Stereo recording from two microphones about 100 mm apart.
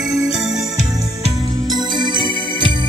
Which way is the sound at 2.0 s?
50° right (ahead or behind).